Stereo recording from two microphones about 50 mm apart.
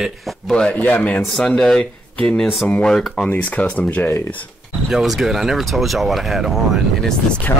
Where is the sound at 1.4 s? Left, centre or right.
Centre.